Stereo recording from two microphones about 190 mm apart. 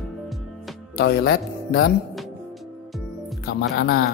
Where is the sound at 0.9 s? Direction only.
55° left (ahead or behind).